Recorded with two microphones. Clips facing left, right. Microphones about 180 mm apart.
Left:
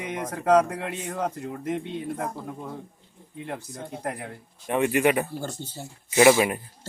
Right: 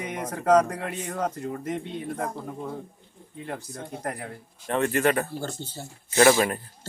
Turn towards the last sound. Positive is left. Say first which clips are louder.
# left 1 dB
turn(degrees=10)  # may be behind; listen again after turning